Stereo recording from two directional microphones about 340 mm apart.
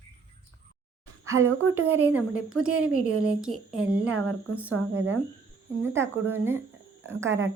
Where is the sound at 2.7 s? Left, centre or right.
Right.